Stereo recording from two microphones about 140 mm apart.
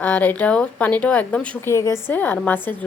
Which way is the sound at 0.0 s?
10° left (ahead or behind).